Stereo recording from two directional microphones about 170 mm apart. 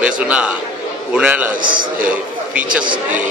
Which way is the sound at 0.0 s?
5° right (ahead or behind).